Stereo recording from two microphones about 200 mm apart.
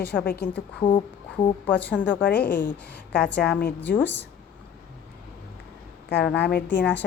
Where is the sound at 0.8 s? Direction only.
25° left (ahead or behind).